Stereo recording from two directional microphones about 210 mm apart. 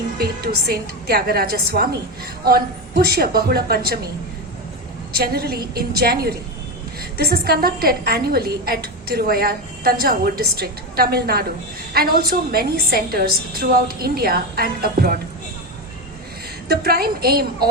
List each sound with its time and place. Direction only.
0.2 s a woman's voice: 45° right (ahead or behind)
3.0 s a woman's voice: 45° right (ahead or behind)
5.1 s a woman's voice: 45° right (ahead or behind)
16.6 s a woman's voice: 45° right (ahead or behind)